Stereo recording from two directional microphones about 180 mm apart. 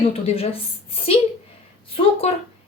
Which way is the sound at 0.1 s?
35° left (ahead or behind).